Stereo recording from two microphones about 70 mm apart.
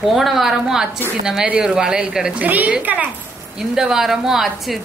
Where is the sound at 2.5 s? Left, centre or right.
Right.